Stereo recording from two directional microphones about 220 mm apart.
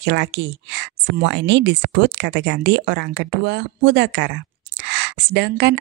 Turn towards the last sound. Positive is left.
turn(degrees=-50)  # may be behind; listen again after turning